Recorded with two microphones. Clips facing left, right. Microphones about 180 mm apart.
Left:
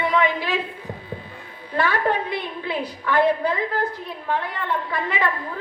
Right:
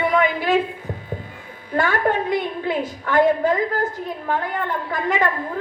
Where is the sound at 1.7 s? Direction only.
45° right (ahead or behind).